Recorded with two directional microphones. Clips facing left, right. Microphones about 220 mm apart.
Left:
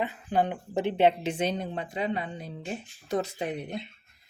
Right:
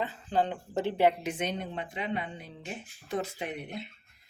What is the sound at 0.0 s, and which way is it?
A woman's voice, 15° left (ahead or behind).